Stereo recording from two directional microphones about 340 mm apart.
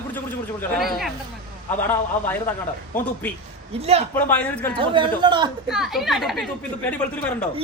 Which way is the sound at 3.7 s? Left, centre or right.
Centre.